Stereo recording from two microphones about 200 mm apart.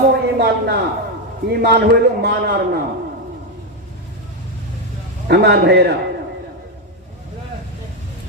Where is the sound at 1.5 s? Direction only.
50° right (ahead or behind).